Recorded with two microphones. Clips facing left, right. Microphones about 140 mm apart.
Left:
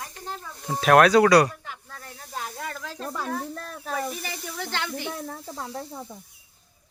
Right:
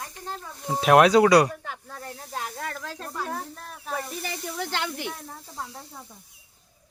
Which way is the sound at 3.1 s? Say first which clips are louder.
Left 3 dB; 90° left.